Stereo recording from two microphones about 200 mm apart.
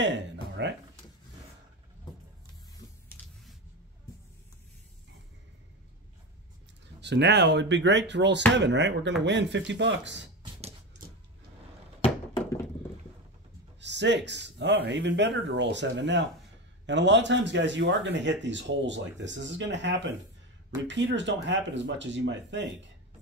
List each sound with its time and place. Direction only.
0.0 s a sound: 60° right (ahead or behind)
7.0 s a man's voice: 60° right (ahead or behind)
13.7 s a man's voice: 60° right (ahead or behind)